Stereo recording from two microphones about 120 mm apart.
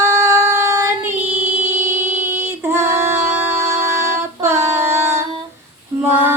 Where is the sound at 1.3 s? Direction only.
15° right (ahead or behind).